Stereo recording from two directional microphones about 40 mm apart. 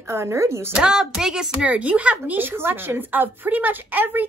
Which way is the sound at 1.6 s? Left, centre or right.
Right.